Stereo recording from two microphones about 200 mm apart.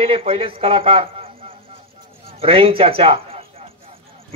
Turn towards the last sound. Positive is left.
turn(degrees=-30)  # may be behind; listen again after turning